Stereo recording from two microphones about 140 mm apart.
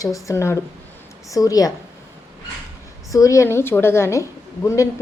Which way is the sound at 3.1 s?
25° left (ahead or behind).